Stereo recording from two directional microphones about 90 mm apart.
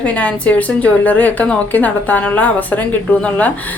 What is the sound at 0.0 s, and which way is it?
A woman's voice, 15° left (ahead or behind).